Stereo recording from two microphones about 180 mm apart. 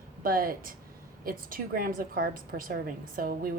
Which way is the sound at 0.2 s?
50° right (ahead or behind).